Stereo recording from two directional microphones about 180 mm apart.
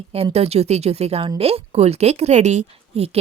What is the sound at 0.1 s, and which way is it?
Speech, 35° right (ahead or behind).